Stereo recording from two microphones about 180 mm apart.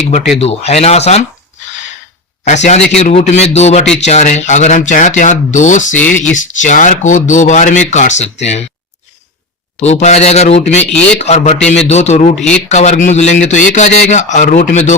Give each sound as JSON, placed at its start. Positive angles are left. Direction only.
{"t": 0.3, "sound": "a man's voice", "side_deg": 35}
{"t": 2.4, "sound": "a man's voice", "side_deg": 40}
{"t": 6.0, "sound": "speech", "side_deg": 10}
{"t": 6.3, "sound": "speech", "side_deg": 45}
{"t": 9.8, "sound": "a man's voice", "side_deg": 40}